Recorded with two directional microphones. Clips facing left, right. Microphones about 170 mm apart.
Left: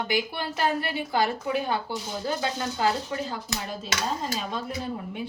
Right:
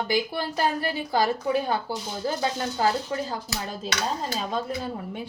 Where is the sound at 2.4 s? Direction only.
35° right (ahead or behind).